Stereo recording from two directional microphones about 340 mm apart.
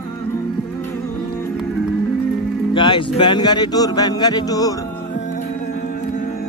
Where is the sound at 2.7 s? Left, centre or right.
Centre.